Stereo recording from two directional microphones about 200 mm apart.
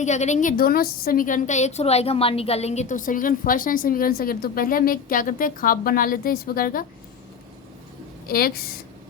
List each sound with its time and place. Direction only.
0.0 s a woman's voice: 35° left (ahead or behind)
8.3 s a woman's voice: 50° left (ahead or behind)